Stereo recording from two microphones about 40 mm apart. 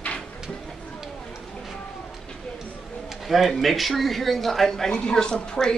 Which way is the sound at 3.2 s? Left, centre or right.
Centre.